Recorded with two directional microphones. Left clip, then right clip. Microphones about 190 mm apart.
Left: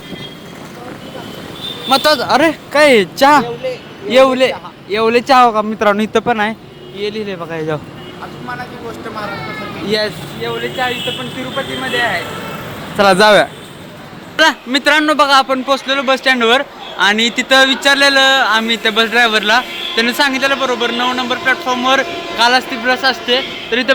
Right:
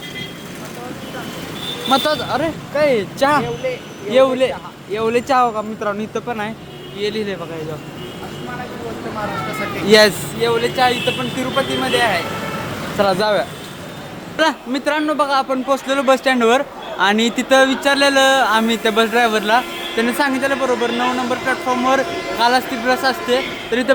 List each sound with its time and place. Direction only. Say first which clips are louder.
1.9 s speech: left 6 dB; 25° left (ahead or behind)
7.0 s speech: left 1 dB; 5° left (ahead or behind)
10.4 s speech: right 3 dB; 30° right (ahead or behind)
11.5 s speech: even; 15° right (ahead or behind)
13.0 s speech: left 8 dB; 25° left (ahead or behind)
14.3 s a man's voice: left 6 dB; centre (ahead or behind)